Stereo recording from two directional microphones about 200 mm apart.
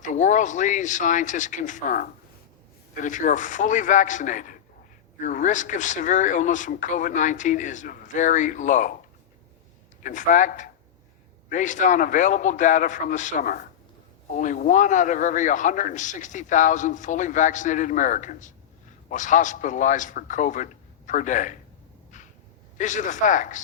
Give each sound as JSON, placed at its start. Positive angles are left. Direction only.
{"t": 0.0, "sound": "a man's voice", "side_deg": 40}
{"t": 10.0, "sound": "a man's voice", "side_deg": 40}
{"t": 22.8, "sound": "a man's voice", "side_deg": 40}